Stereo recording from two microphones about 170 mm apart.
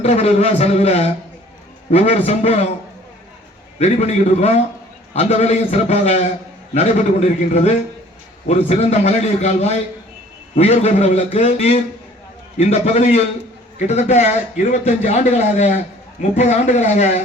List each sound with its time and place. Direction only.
0.0 s a man's voice: 40° left (ahead or behind)
3.8 s a man's voice: 40° left (ahead or behind)